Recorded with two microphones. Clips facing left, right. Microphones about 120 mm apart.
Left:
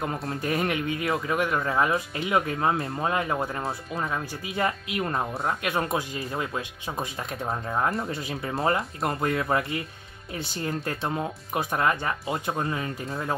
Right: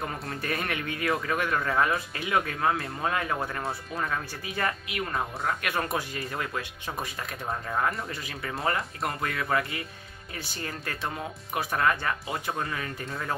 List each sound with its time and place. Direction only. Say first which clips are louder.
0.3 s speech: left 6 dB; 15° left (ahead or behind)